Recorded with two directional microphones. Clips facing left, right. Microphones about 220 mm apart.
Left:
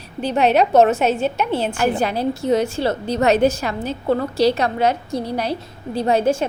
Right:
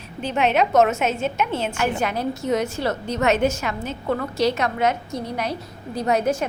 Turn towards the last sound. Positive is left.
turn(degrees=30)  # may be behind; listen again after turning